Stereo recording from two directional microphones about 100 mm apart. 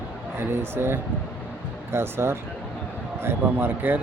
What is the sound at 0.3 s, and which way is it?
A man's voice, 25° right (ahead or behind).